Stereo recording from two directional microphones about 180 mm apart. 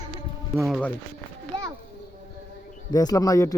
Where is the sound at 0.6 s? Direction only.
Centre (ahead or behind).